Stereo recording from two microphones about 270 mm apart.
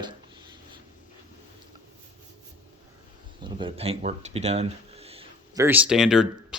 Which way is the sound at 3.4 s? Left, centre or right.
Centre.